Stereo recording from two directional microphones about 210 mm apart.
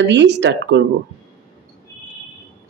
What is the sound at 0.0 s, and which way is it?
Speech, 55° right (ahead or behind).